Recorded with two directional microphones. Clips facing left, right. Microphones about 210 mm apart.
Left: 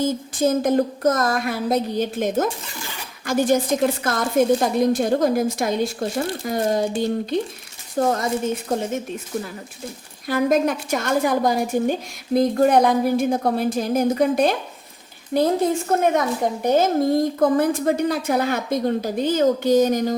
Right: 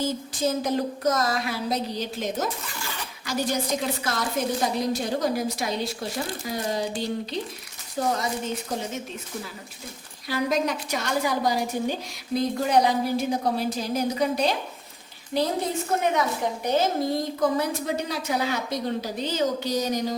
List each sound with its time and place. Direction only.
0.0 s a woman's voice: 50° left (ahead or behind)
10.2 s a woman's voice: 50° left (ahead or behind)